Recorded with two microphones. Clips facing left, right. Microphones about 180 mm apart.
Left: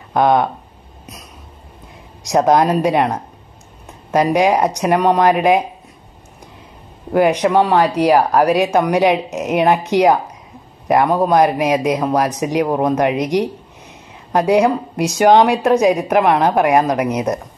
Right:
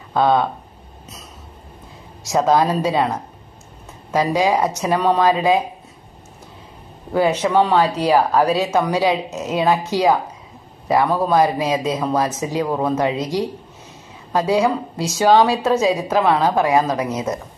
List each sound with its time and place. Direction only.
0.1 s speech: 15° left (ahead or behind)
2.2 s a woman's voice: 20° left (ahead or behind)
4.1 s a woman's voice: 20° left (ahead or behind)
7.2 s a woman's voice: 15° left (ahead or behind)